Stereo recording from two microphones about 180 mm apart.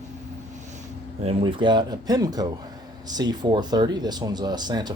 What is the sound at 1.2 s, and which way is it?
Speech, 30° right (ahead or behind).